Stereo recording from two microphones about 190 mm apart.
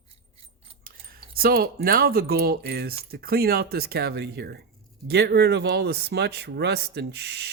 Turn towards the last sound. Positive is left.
turn(degrees=-60)  # may be behind; listen again after turning